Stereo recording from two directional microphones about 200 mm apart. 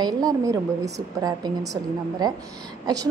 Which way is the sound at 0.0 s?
20° right (ahead or behind).